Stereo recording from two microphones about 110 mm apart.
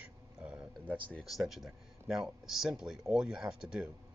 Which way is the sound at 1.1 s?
Centre (ahead or behind).